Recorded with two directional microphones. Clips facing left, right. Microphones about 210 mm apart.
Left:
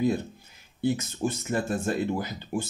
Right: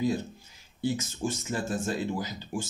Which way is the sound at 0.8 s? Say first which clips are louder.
Left 3 dB; 60° left (ahead or behind).